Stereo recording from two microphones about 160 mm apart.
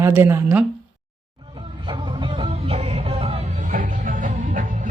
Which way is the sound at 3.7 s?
55° right (ahead or behind).